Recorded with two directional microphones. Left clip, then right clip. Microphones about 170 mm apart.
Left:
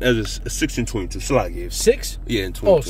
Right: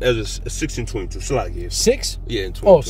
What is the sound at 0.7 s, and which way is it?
Speech, 60° left (ahead or behind).